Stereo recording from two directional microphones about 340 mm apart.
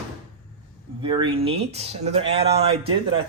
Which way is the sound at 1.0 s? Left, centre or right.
Centre.